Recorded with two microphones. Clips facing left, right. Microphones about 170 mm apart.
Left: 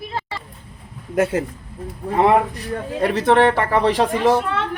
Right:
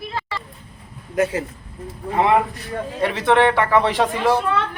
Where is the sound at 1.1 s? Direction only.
55° left (ahead or behind).